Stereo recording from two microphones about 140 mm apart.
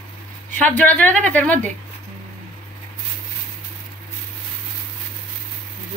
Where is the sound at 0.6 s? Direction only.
10° left (ahead or behind).